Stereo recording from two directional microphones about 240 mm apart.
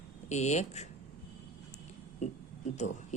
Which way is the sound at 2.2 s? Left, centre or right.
Left.